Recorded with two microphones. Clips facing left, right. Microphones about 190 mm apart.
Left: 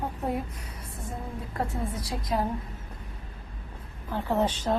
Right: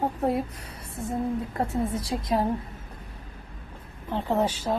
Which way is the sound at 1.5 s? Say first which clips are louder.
Right 4 dB; 25° right (ahead or behind).